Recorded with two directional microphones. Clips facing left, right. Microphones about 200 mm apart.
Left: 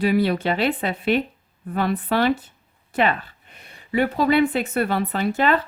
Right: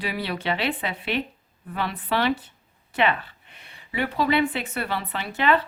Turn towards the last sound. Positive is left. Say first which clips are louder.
# left 3 dB
turn(degrees=45)  # may be behind; listen again after turning